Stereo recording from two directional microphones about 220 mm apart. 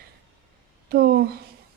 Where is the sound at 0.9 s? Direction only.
45° right (ahead or behind).